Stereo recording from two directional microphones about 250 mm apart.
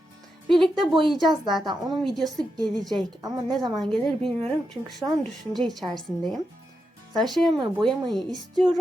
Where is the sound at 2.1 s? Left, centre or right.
Centre.